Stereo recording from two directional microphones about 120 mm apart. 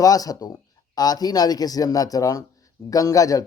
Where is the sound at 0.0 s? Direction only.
30° left (ahead or behind).